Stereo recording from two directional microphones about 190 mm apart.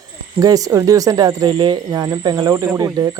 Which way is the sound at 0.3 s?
20° right (ahead or behind).